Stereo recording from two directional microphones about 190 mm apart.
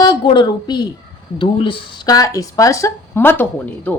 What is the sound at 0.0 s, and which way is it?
A woman's voice, 25° left (ahead or behind).